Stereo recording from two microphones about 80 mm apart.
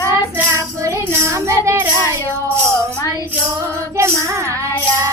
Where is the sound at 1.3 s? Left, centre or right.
Right.